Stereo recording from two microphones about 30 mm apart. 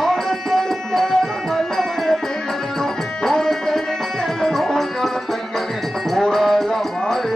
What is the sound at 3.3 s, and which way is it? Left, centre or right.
Tabla, centre.